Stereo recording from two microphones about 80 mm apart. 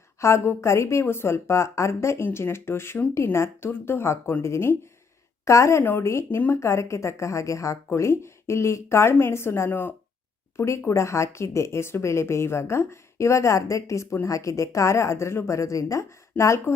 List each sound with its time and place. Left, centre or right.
0.2 s a woman's voice: left